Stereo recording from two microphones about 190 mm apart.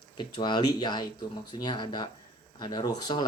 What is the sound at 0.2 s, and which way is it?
A man's voice, 25° left (ahead or behind).